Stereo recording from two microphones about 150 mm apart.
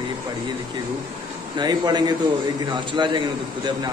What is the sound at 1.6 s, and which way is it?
A man's voice, 30° right (ahead or behind).